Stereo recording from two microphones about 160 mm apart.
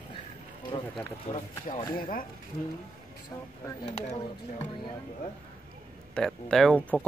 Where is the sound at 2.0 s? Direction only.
60° left (ahead or behind).